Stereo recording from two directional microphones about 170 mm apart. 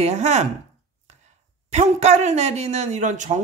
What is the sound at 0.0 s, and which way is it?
Speech, 40° right (ahead or behind).